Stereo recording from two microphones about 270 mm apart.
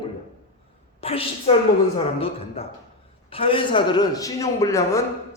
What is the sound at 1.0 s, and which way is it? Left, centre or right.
A woman's voice, left.